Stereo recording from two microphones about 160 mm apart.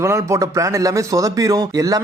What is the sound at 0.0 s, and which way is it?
A man's voice, 20° right (ahead or behind).